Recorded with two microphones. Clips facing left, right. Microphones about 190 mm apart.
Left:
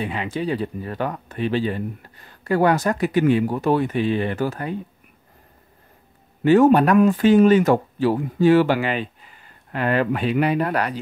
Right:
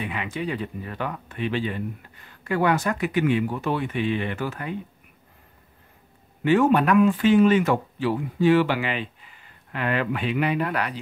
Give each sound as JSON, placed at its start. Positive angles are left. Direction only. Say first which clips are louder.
{"t": 0.0, "sound": "speech", "louder": "left 4 dB", "side_deg": 35}
{"t": 6.4, "sound": "speech", "louder": "left 5 dB", "side_deg": 40}